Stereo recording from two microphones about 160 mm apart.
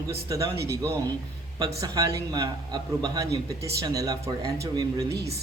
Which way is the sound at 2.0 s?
25° right (ahead or behind).